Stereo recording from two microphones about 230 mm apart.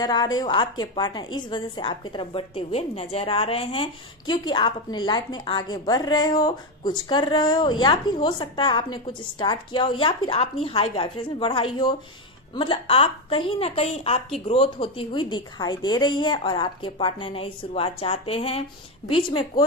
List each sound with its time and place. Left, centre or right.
0.0 s a woman's voice: centre